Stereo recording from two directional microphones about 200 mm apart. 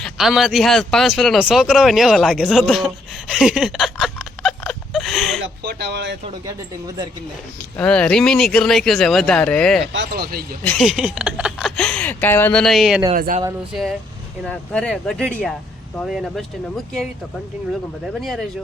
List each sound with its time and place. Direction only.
0.0 s speech: centre (ahead or behind)
5.4 s speech: 55° right (ahead or behind)
6.2 s speech: 20° right (ahead or behind)
7.8 s speech: 5° left (ahead or behind)
9.9 s speech: 60° right (ahead or behind)
10.6 s speech: 5° left (ahead or behind)
13.1 s speech: 45° right (ahead or behind)
14.4 s speech: 5° left (ahead or behind)